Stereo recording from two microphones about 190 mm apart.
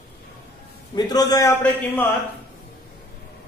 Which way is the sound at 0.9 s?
20° left (ahead or behind).